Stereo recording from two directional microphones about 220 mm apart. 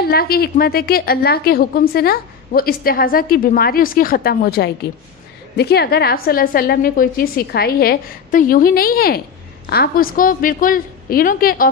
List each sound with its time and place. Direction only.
0.0 s a woman's voice: 45° left (ahead or behind)